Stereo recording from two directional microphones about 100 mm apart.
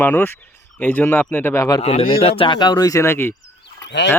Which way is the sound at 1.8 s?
75° left (ahead or behind).